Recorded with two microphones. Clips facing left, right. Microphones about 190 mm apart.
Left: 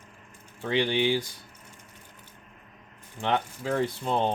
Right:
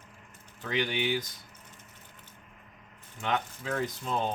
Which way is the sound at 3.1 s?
30° left (ahead or behind).